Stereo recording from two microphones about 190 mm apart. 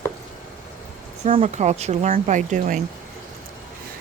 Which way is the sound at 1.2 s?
35° right (ahead or behind).